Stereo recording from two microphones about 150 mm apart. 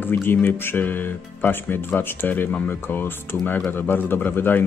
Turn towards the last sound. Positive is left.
turn(degrees=15)  # may be behind; listen again after turning